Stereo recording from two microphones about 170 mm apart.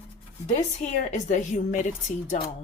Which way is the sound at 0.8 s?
45° left (ahead or behind).